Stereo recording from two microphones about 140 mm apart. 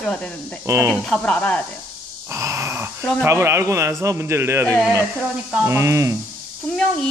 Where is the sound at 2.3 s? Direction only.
20° right (ahead or behind).